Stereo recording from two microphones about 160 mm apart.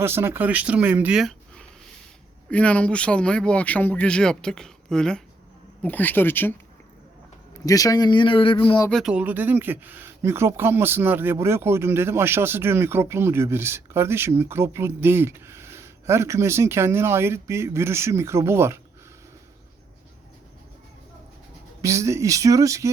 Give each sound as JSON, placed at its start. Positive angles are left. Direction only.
{"t": 0.0, "sound": "speech", "side_deg": -15}
{"t": 7.6, "sound": "speech", "side_deg": 20}
{"t": 8.9, "sound": "speech", "side_deg": 0}
{"t": 9.1, "sound": "speech", "side_deg": -10}
{"t": 21.8, "sound": "speech", "side_deg": -20}